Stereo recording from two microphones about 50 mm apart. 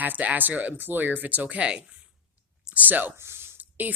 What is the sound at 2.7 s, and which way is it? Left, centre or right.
Speech, right.